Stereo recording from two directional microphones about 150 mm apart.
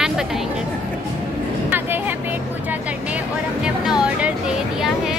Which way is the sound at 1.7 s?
15° right (ahead or behind).